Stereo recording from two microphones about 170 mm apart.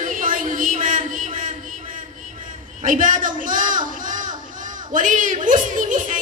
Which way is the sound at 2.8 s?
50° right (ahead or behind).